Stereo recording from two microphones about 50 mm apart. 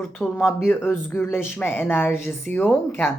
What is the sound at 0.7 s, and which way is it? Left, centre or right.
Speech, left.